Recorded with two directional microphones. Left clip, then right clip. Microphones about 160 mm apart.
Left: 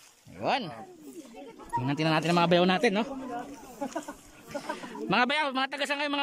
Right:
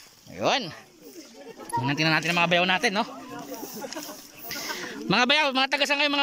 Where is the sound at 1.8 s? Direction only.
20° left (ahead or behind).